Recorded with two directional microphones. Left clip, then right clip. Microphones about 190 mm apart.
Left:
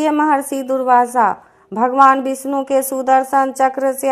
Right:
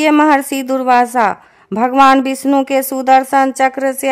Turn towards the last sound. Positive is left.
turn(degrees=-45)  # may be behind; listen again after turning